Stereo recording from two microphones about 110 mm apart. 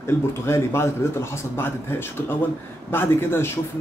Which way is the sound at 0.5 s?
25° left (ahead or behind).